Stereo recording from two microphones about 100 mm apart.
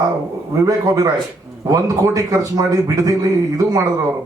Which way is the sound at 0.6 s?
35° right (ahead or behind).